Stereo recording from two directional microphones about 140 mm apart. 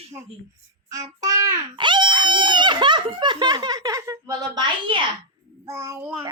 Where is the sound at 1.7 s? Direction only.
35° right (ahead or behind).